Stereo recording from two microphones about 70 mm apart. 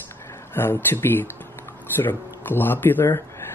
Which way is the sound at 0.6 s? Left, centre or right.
Left.